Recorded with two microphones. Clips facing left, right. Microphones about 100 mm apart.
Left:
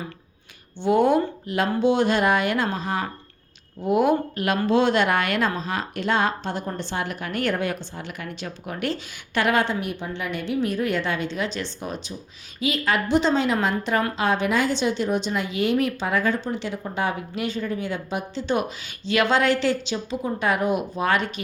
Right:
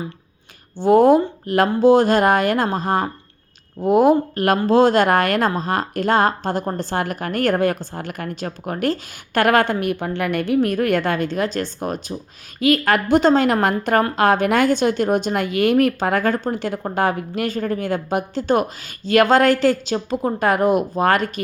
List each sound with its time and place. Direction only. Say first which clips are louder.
0.8 s speech: right 6 dB; 40° right (ahead or behind)